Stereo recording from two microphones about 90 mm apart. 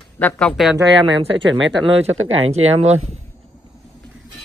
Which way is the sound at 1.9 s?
90° right.